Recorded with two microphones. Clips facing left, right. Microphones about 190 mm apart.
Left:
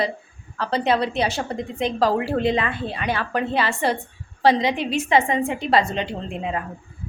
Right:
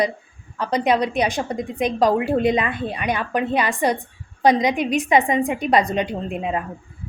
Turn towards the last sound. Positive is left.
turn(degrees=-20)  # may be behind; listen again after turning